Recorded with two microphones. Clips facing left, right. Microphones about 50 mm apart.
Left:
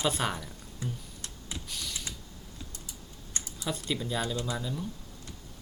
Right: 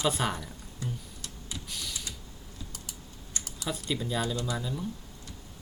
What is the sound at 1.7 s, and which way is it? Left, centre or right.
Creak, centre.